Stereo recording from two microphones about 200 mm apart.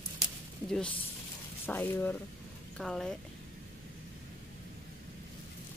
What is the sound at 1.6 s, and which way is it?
Speech, 10° left (ahead or behind).